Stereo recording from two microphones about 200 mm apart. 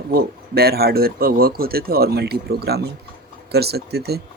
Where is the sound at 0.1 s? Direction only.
50° right (ahead or behind).